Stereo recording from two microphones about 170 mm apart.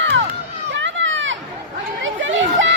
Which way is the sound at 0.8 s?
90° right.